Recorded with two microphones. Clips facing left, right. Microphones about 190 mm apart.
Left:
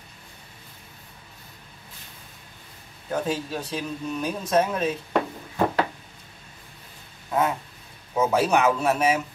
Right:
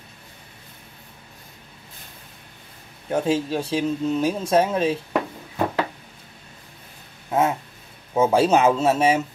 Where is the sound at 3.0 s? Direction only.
25° right (ahead or behind).